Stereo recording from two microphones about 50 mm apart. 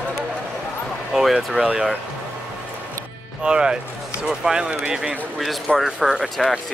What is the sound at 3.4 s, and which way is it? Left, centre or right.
Speech, centre.